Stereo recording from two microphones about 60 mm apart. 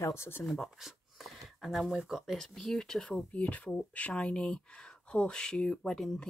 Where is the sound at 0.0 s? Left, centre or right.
Left.